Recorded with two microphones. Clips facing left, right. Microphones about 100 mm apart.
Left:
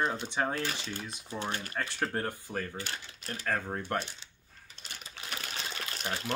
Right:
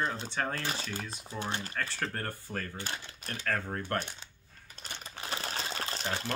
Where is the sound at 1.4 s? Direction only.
25° right (ahead or behind).